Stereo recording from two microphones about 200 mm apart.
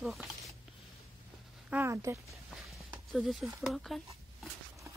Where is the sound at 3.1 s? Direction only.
Centre (ahead or behind).